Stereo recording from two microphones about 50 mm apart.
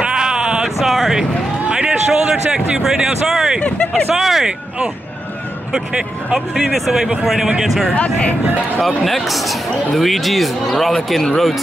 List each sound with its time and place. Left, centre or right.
0.0 s bleat: centre
0.7 s a sound: centre
2.8 s speech: centre
5.7 s speech: centre
7.9 s speech: left
8.7 s speech: centre